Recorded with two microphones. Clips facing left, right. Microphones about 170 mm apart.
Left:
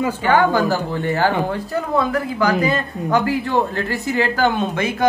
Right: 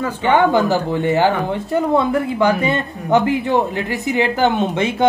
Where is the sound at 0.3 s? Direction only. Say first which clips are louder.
Right 3 dB; 20° right (ahead or behind).